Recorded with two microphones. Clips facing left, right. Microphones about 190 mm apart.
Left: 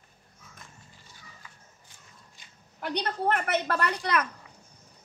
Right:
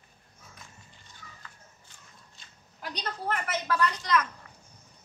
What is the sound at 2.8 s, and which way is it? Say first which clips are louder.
A woman's voice: left 7 dB; 60° left (ahead or behind).